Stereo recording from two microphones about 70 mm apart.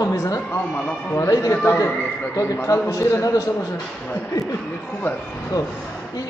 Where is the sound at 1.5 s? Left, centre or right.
Left.